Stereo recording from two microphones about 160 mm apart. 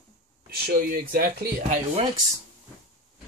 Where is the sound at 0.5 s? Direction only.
70° right (ahead or behind).